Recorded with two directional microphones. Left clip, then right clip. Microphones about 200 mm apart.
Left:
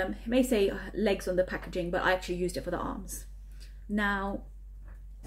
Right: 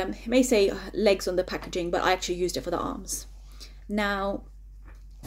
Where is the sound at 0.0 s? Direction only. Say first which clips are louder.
Right 4 dB; 10° left (ahead or behind).